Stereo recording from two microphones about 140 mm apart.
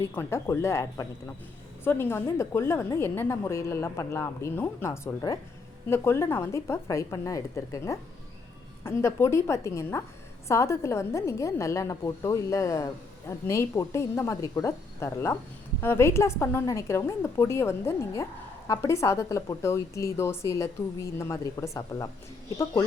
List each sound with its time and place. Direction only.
0.0 s a woman's voice: 20° left (ahead or behind)